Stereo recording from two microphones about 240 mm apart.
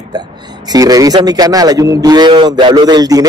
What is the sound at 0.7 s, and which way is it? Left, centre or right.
A man's voice, centre.